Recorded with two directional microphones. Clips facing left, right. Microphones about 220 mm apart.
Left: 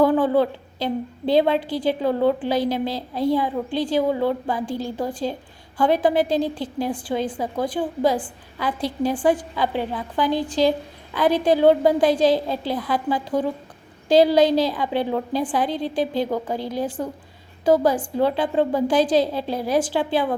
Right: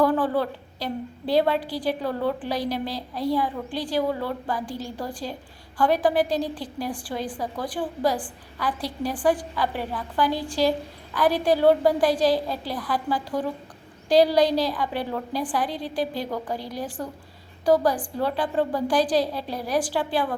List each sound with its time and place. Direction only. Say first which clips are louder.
0.0 s a woman's voice: left 4 dB; 25° left (ahead or behind)